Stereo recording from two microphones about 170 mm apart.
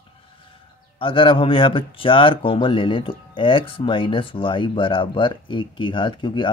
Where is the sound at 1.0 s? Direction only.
30° left (ahead or behind).